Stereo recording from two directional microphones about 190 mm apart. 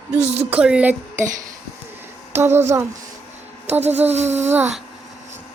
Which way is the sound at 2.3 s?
10° right (ahead or behind).